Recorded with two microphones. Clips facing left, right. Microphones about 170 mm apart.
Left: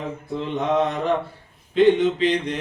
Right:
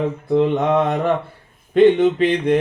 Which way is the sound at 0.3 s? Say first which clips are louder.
Right 6 dB; 60° right (ahead or behind).